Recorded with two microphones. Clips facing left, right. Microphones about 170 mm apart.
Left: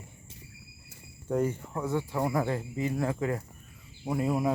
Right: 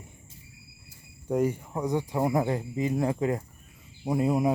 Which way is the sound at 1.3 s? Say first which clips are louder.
Right 2 dB; 10° right (ahead or behind).